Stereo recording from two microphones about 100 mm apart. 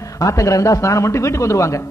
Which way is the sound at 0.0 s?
30° left (ahead or behind).